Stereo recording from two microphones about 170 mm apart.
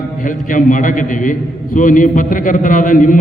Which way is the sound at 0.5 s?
50° left (ahead or behind).